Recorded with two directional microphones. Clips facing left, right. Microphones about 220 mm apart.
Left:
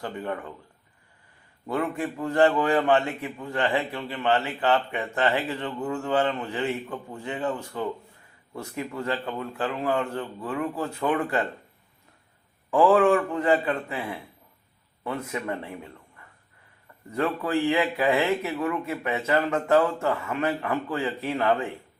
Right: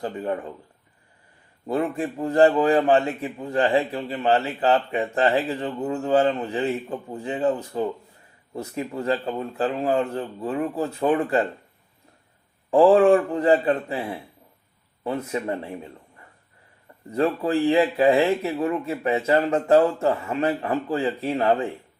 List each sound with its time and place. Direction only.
0.0 s speech: 30° right (ahead or behind)
1.6 s a man's voice: 30° right (ahead or behind)
12.7 s a man's voice: 30° right (ahead or behind)